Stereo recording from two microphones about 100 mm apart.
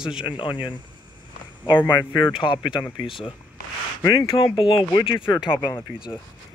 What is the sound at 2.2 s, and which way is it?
Speech, 55° left (ahead or behind).